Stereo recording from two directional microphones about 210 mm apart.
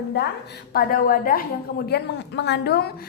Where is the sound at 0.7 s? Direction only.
45° left (ahead or behind).